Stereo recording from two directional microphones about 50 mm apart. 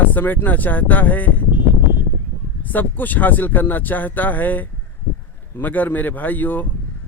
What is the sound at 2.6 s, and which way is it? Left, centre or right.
Speech, left.